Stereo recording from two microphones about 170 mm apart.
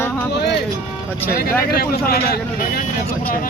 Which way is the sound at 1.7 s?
60° left (ahead or behind).